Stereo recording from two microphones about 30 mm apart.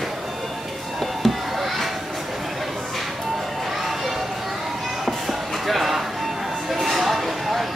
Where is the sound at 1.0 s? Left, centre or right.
Centre.